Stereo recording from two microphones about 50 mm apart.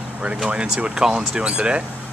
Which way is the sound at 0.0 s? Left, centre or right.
Right.